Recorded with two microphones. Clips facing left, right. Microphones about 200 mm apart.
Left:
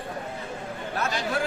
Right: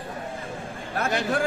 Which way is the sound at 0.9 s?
55° right (ahead or behind).